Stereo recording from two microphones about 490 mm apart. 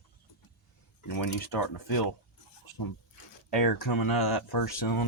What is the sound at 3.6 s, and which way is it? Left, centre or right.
Speech, left.